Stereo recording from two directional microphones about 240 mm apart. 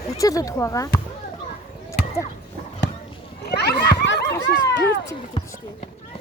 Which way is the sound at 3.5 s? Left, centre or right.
Left.